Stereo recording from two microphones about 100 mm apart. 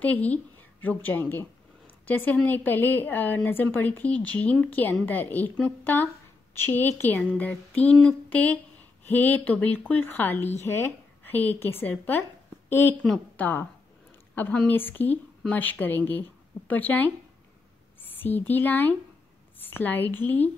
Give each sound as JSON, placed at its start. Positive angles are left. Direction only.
{"t": 0.0, "sound": "a woman's voice", "side_deg": 15}
{"t": 18.0, "sound": "a sound", "side_deg": 20}
{"t": 18.5, "sound": "speech", "side_deg": 20}